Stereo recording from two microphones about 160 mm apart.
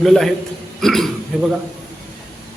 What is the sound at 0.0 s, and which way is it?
A man's voice, centre (ahead or behind).